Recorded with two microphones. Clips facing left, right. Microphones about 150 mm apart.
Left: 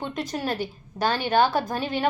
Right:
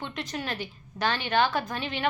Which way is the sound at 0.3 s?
40° left (ahead or behind).